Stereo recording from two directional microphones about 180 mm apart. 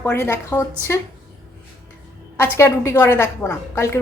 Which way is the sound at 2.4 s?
15° left (ahead or behind).